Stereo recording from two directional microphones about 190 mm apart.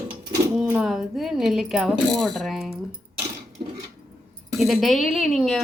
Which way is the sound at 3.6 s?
25° right (ahead or behind).